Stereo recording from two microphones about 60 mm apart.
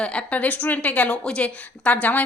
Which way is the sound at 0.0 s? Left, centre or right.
Centre.